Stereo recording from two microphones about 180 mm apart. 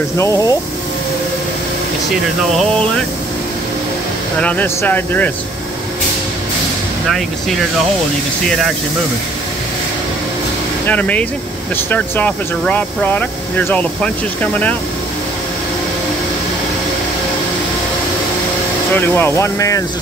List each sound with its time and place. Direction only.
0.2 s speech: 15° left (ahead or behind)
4.4 s speech: 10° left (ahead or behind)
10.9 s speech: 10° left (ahead or behind)
18.9 s speech: 10° left (ahead or behind)